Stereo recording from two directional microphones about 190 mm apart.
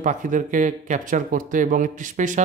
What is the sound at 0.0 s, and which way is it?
Speech, 40° right (ahead or behind).